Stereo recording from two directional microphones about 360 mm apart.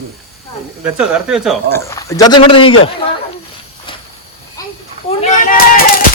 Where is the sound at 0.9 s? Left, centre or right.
Centre.